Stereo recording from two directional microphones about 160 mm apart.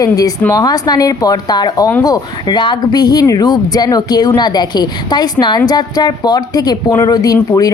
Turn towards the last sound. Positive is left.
turn(degrees=25)  # may be behind; listen again after turning